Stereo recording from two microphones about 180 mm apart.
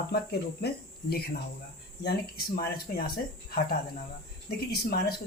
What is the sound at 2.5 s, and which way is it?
Speech, 55° left (ahead or behind).